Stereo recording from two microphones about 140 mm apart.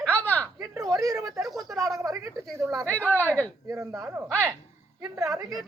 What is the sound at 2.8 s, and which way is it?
Speech, 15° left (ahead or behind).